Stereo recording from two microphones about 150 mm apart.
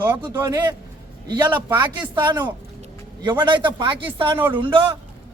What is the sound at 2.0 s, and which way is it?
A man's voice, 30° right (ahead or behind).